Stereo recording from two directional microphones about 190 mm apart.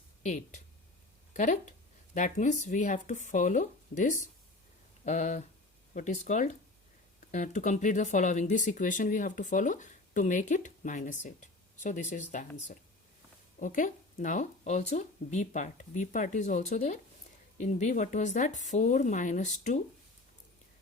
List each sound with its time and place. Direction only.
0.2 s speech: 40° left (ahead or behind)